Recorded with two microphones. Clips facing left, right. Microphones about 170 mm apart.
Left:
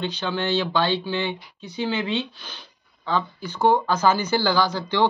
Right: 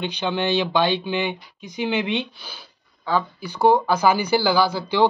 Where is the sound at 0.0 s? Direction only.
15° right (ahead or behind).